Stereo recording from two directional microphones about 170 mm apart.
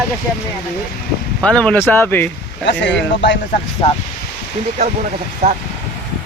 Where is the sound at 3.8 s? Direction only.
35° left (ahead or behind).